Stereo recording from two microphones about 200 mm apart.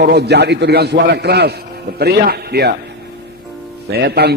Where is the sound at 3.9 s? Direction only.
55° right (ahead or behind).